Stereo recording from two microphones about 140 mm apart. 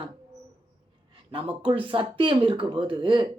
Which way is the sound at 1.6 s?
40° right (ahead or behind).